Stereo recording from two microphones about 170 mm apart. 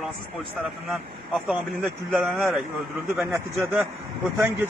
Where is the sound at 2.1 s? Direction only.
5° right (ahead or behind).